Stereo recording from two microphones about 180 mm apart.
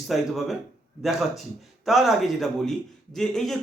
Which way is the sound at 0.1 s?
Centre (ahead or behind).